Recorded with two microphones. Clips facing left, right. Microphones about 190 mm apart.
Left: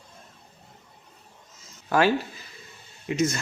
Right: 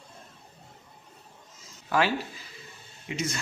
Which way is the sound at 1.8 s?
45° left (ahead or behind).